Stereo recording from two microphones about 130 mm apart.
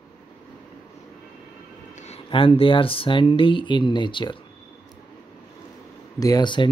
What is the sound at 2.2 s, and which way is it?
Speech, 40° left (ahead or behind).